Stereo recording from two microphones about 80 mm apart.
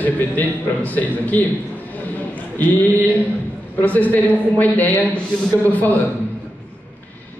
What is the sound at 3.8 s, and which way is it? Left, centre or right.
A woman's voice, left.